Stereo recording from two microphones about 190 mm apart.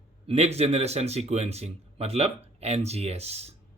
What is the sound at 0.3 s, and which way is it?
Speech, 35° right (ahead or behind).